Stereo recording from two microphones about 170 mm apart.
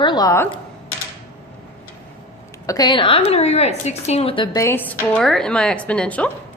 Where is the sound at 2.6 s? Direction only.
20° left (ahead or behind).